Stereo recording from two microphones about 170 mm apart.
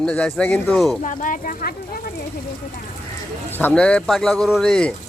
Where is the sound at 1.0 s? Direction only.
50° left (ahead or behind).